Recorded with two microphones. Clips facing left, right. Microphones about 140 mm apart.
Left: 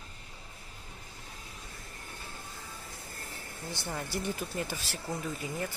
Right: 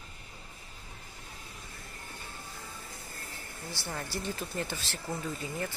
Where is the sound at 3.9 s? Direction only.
15° left (ahead or behind).